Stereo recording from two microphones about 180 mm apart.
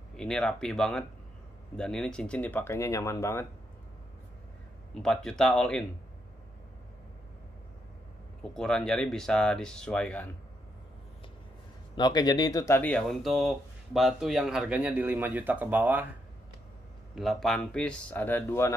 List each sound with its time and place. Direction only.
0.1 s speech: 5° left (ahead or behind)
5.0 s speech: 5° left (ahead or behind)
8.5 s speech: 5° left (ahead or behind)
11.9 s speech: 25° left (ahead or behind)
12.9 s speech: centre (ahead or behind)
17.1 s speech: centre (ahead or behind)